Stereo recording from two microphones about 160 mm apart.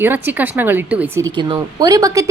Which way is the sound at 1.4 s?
25° right (ahead or behind).